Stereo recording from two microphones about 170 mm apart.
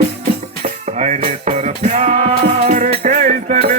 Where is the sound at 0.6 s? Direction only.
40° right (ahead or behind).